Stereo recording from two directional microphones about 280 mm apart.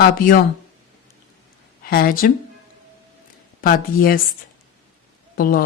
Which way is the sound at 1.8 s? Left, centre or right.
Left.